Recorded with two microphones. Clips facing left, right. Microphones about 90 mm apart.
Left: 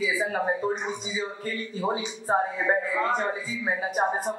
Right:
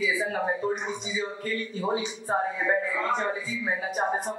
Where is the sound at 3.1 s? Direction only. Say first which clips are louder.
Left 1 dB; 10° left (ahead or behind).